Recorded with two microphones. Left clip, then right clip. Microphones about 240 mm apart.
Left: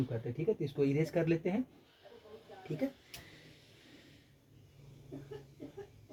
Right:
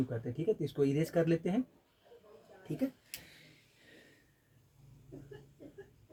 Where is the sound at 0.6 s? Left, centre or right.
Right.